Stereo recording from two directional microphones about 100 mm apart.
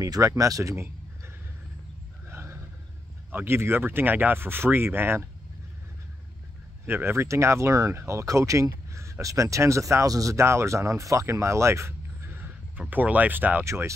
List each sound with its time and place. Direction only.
0.0 s speech: 35° right (ahead or behind)
2.2 s a sound: 25° right (ahead or behind)
3.3 s speech: 20° right (ahead or behind)
6.9 s speech: 25° right (ahead or behind)
12.8 s speech: 15° right (ahead or behind)
13.7 s speech: 30° right (ahead or behind)